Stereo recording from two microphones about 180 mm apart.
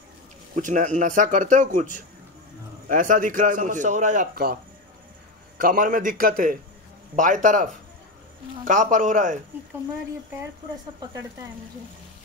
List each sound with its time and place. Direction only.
0.6 s a man's voice: 45° right (ahead or behind)
5.6 s a man's voice: 50° right (ahead or behind)